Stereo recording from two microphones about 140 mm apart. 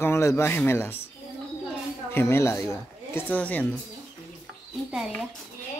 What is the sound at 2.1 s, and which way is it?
Speech, 20° left (ahead or behind).